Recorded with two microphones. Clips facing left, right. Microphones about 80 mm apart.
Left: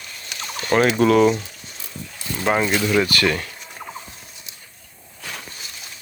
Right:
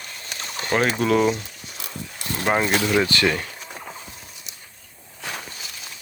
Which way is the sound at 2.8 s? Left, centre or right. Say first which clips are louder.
Left 1 dB; right.